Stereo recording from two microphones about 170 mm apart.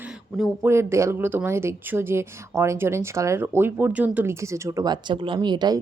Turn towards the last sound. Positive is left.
turn(degrees=-25)  # may be behind; listen again after turning